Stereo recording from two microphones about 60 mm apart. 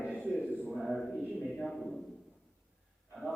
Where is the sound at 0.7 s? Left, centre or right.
Centre.